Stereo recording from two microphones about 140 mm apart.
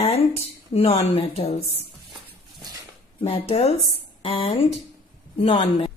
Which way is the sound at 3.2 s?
45° left (ahead or behind).